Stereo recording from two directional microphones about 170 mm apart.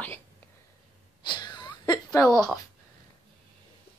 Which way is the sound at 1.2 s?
25° left (ahead or behind).